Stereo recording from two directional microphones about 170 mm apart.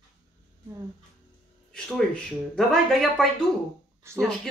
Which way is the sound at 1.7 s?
5° left (ahead or behind).